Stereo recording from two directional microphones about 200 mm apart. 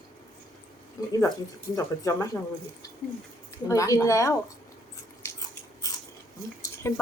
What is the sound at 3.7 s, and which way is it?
Speech, 15° left (ahead or behind).